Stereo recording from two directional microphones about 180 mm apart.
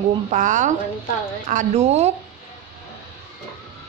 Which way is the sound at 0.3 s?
45° right (ahead or behind).